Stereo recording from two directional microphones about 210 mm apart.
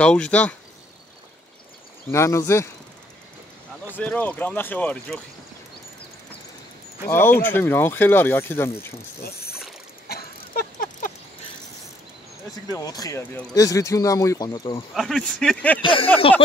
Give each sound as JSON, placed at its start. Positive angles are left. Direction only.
{"t": 0.0, "sound": "speech", "side_deg": 5}
{"t": 2.0, "sound": "speech", "side_deg": 15}
{"t": 3.9, "sound": "speech", "side_deg": 5}
{"t": 7.1, "sound": "speech", "side_deg": 10}
{"t": 9.2, "sound": "mechanisms", "side_deg": 50}
{"t": 10.0, "sound": "a sound", "side_deg": 45}
{"t": 12.7, "sound": "speech", "side_deg": 15}
{"t": 15.0, "sound": "speech", "side_deg": 0}
{"t": 15.8, "sound": "speech", "side_deg": 25}